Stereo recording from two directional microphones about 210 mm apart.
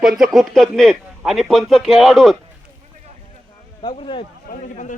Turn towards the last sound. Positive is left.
turn(degrees=35)  # may be behind; listen again after turning